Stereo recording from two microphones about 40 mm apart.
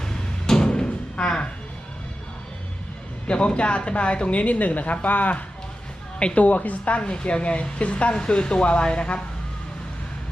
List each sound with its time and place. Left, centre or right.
0.0 s door: centre
3.2 s a woman's voice: left
6.1 s a woman's voice: left
6.4 s a woman's voice: left